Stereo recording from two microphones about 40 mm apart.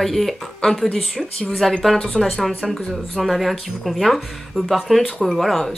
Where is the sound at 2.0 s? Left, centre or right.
Centre.